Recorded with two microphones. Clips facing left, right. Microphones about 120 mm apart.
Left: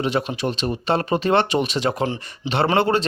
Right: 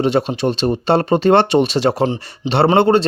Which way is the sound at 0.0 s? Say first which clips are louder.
Right 6 dB; 30° right (ahead or behind).